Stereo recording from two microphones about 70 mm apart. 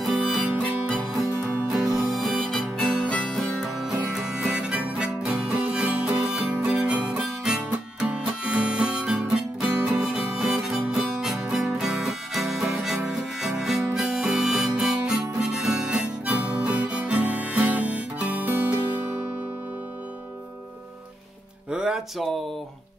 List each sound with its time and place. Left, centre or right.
0.0 s music: centre
6.5 s music: right
9.8 s harmonica: centre
11.1 s music: centre
13.9 s harmonica: centre; by 18.8 s right
21.6 s music: centre